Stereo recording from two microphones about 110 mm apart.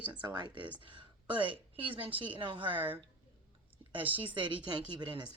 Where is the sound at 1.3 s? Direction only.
55° right (ahead or behind).